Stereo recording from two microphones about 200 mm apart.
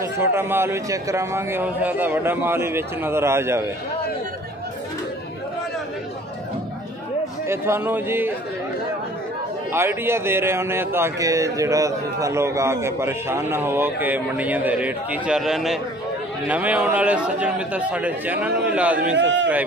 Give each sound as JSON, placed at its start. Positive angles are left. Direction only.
{"t": 0.2, "sound": "a man's voice", "side_deg": -10}
{"t": 7.4, "sound": "a man's voice", "side_deg": -10}
{"t": 9.7, "sound": "a man's voice", "side_deg": -10}
{"t": 19.1, "sound": "a man's voice", "side_deg": -65}